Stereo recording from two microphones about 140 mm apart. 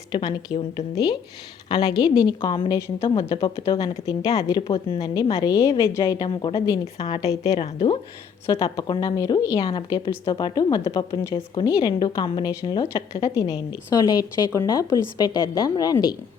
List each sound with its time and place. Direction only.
0.1 s a woman's voice: 30° left (ahead or behind)
7.4 s speech: 45° left (ahead or behind)
8.4 s a woman's voice: 30° left (ahead or behind)
9.6 s a woman's voice: 40° left (ahead or behind)
9.9 s a woman's voice: 25° left (ahead or behind)